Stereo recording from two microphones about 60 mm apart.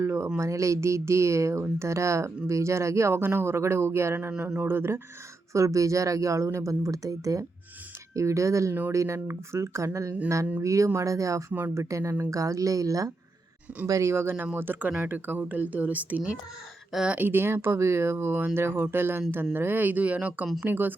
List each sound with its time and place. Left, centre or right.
0.0 s a sound: right
0.3 s speech: right
5.5 s speech: right
8.1 s speech: right
13.8 s speech: right